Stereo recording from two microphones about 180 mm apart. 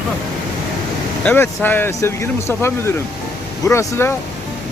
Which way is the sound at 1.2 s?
10° left (ahead or behind).